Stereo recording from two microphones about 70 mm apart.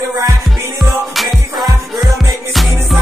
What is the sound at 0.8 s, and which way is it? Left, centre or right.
Music, centre.